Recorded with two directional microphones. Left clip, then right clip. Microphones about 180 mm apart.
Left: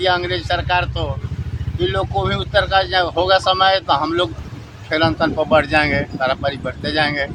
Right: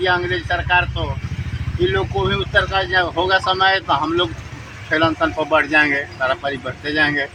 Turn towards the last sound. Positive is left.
turn(degrees=25)  # may be behind; listen again after turning